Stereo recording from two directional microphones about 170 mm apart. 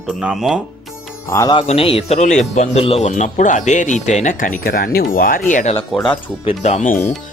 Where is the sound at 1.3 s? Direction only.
20° left (ahead or behind).